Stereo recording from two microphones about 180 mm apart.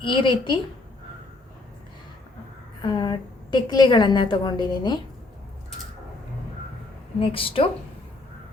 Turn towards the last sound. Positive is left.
turn(degrees=30)  # may be behind; listen again after turning